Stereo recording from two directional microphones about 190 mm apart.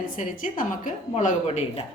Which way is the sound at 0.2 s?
45° left (ahead or behind).